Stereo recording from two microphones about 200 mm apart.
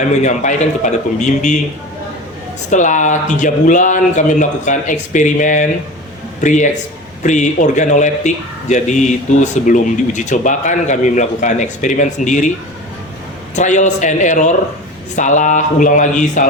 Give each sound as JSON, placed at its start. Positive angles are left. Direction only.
{"t": 0.0, "sound": "a man's voice", "side_deg": 35}
{"t": 2.6, "sound": "a man's voice", "side_deg": 40}
{"t": 13.6, "sound": "a man's voice", "side_deg": 35}